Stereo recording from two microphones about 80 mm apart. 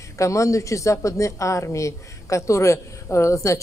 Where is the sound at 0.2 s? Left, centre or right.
Left.